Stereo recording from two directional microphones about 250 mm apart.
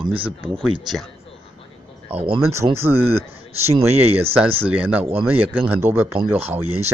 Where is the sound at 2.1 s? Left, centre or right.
Right.